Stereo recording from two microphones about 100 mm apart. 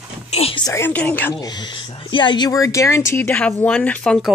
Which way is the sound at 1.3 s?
40° left (ahead or behind).